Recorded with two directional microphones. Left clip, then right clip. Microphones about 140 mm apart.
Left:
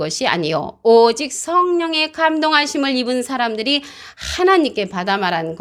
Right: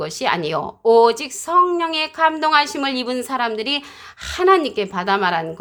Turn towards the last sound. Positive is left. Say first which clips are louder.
# even
turn(degrees=25)  # may be behind; listen again after turning